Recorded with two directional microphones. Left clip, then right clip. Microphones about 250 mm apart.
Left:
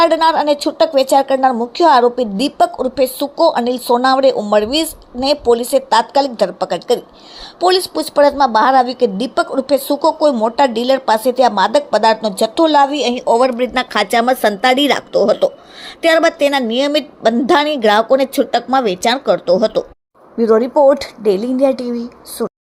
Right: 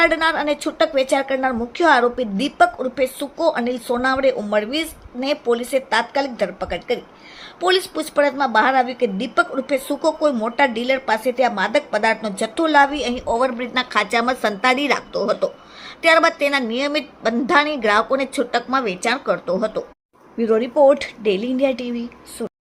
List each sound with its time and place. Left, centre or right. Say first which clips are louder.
0.0 s a woman's voice: left 6 dB; centre
21.2 s speech: left 6 dB; centre
21.8 s a woman's voice: left 5 dB; centre